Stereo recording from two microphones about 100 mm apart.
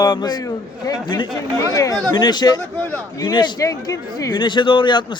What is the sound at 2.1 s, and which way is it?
Speech, 45° left (ahead or behind).